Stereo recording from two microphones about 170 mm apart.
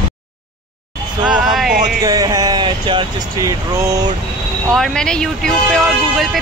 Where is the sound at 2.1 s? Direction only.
20° right (ahead or behind).